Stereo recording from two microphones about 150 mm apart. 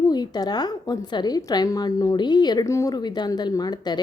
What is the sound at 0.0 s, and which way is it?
A woman's voice, 25° left (ahead or behind).